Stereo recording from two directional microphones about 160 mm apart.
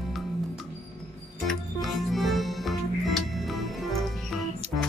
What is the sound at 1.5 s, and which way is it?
Music, centre (ahead or behind).